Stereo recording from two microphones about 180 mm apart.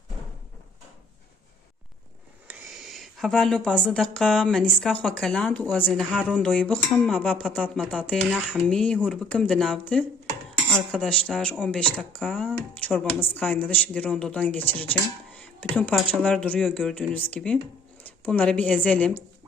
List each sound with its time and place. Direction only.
2.5 s speech: centre (ahead or behind)